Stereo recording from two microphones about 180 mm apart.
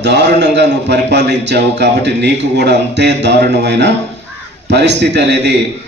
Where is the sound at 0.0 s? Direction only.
75° right (ahead or behind).